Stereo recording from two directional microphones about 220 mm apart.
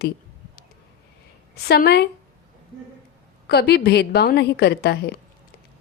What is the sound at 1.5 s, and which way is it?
Speech, 45° left (ahead or behind).